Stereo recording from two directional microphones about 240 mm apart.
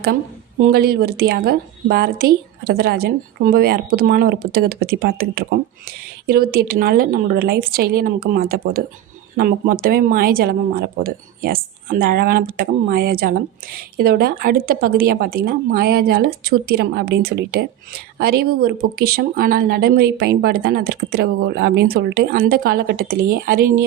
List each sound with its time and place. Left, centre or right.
0.6 s speech: right